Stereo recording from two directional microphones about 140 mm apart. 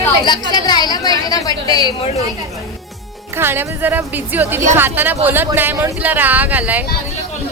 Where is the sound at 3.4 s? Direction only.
15° right (ahead or behind).